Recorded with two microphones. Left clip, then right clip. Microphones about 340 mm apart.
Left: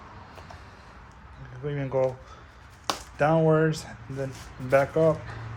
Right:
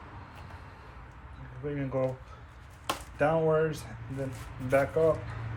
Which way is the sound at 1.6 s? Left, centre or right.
Left.